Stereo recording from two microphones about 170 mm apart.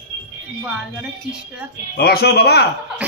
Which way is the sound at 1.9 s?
65° left (ahead or behind).